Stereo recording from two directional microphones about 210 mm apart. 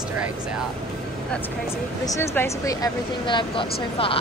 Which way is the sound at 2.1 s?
15° left (ahead or behind).